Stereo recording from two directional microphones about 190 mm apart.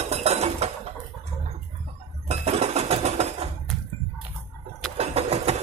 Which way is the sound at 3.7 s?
Centre (ahead or behind).